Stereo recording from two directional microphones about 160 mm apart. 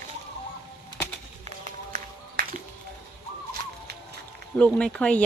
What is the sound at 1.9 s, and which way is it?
Music, 60° right (ahead or behind).